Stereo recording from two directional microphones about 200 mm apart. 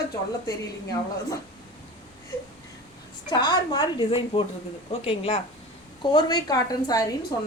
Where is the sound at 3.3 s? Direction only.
20° left (ahead or behind).